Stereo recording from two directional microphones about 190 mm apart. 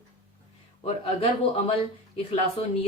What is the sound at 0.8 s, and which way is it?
Speech, 30° left (ahead or behind).